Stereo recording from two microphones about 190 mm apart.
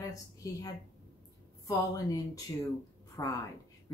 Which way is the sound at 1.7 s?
20° left (ahead or behind).